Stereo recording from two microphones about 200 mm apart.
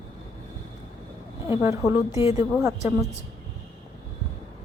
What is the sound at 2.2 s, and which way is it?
Speech, 15° right (ahead or behind).